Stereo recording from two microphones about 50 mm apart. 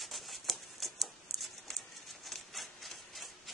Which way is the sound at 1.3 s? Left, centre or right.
Centre.